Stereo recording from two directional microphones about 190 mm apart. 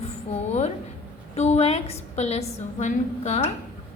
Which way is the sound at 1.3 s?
35° left (ahead or behind).